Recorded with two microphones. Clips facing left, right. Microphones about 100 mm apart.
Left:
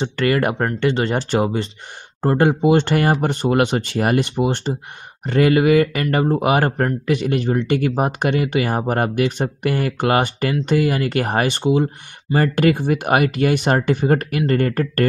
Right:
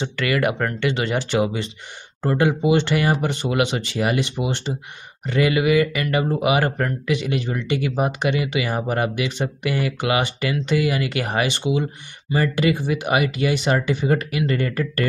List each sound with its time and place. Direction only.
0.0 s speech: 40° left (ahead or behind)